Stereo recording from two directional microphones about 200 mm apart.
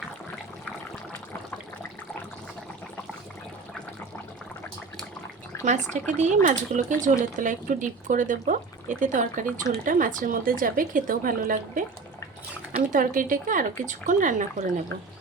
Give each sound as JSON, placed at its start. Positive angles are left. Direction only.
{"t": 5.6, "sound": "a woman's voice", "side_deg": -35}
{"t": 12.9, "sound": "speech", "side_deg": -40}